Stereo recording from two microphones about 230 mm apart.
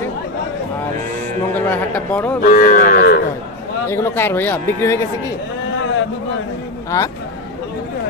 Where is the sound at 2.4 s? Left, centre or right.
Left.